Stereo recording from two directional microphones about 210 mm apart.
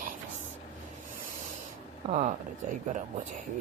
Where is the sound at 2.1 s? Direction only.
35° right (ahead or behind).